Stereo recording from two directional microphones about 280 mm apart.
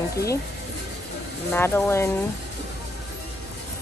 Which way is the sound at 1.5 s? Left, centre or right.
Centre.